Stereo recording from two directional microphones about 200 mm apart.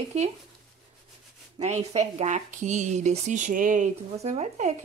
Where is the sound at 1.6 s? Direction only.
35° right (ahead or behind).